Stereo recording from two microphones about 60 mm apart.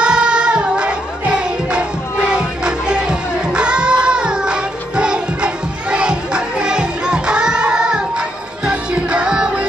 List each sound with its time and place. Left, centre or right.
0.0 s music: centre